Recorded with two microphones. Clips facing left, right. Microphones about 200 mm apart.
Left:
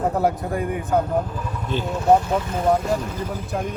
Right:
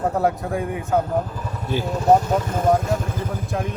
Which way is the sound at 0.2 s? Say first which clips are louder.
Even; centre (ahead or behind).